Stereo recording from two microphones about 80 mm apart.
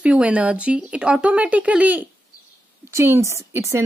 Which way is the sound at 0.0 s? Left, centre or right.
Centre.